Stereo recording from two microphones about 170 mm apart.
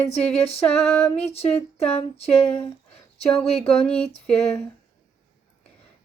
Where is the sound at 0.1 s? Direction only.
35° left (ahead or behind).